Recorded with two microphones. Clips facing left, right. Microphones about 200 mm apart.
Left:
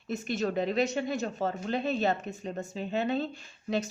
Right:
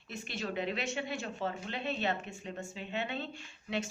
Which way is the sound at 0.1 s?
45° left (ahead or behind).